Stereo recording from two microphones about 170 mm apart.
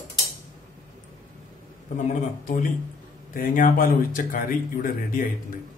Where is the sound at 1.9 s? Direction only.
45° left (ahead or behind).